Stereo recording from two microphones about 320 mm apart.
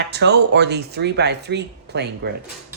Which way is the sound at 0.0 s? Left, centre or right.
Right.